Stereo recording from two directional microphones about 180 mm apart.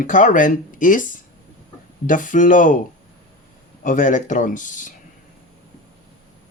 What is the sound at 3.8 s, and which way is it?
Speech, 45° left (ahead or behind).